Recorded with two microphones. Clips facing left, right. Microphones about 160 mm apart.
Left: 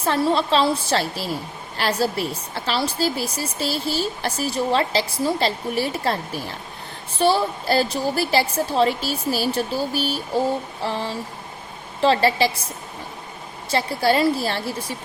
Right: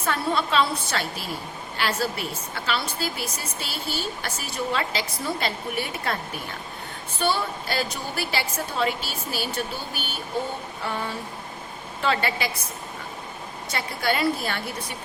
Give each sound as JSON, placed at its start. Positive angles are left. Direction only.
{"t": 0.0, "sound": "a woman's voice", "side_deg": 30}
{"t": 13.7, "sound": "a woman's voice", "side_deg": 30}